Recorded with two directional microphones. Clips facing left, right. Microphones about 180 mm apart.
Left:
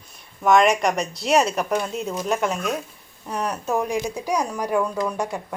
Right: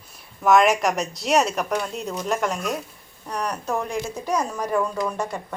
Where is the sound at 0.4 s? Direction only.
5° right (ahead or behind).